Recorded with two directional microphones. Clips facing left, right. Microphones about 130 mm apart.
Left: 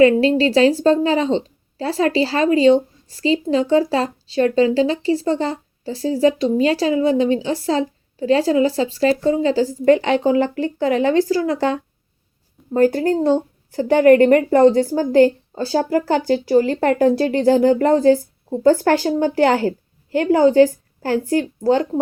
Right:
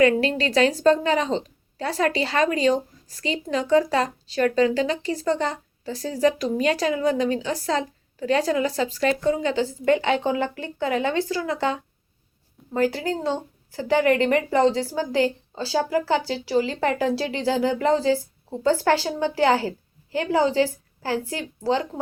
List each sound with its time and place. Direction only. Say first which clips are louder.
0.0 s a woman's voice: left 6 dB; 30° left (ahead or behind); by 21.8 s 45° left (ahead or behind)